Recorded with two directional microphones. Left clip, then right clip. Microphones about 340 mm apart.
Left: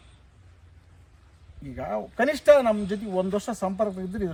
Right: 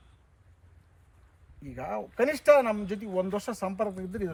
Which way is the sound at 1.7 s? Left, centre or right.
Centre.